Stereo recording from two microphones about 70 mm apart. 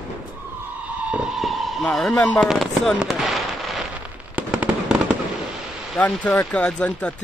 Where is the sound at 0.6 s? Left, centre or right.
Right.